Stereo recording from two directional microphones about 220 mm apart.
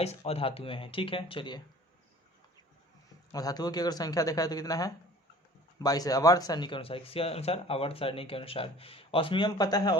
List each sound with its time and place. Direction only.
0.0 s speech: 30° left (ahead or behind)
3.3 s a man's voice: 15° left (ahead or behind)